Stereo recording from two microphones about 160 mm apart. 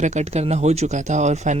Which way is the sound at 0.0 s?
45° right (ahead or behind).